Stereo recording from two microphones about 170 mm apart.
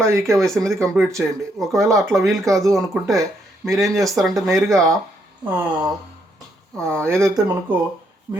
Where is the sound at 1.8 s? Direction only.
20° right (ahead or behind).